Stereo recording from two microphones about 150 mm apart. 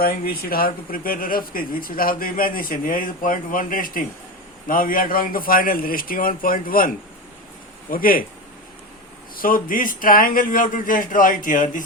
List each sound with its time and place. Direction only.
0.0 s speech: 80° left
9.3 s speech: 70° left (ahead or behind)